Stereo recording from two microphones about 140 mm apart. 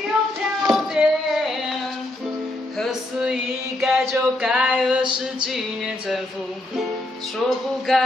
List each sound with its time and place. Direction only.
0.4 s music: centre (ahead or behind)
2.8 s female singing: 5° right (ahead or behind)
4.7 s music: 5° right (ahead or behind)
7.4 s music: centre (ahead or behind)